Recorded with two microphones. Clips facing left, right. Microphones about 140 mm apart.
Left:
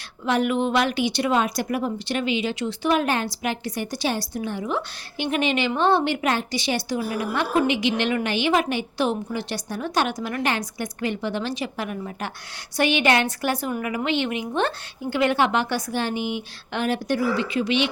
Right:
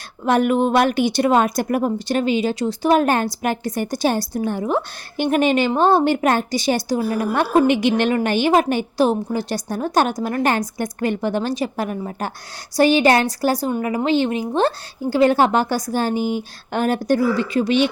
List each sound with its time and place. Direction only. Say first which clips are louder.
0.3 s a woman's voice: right 5 dB; 50° right (ahead or behind)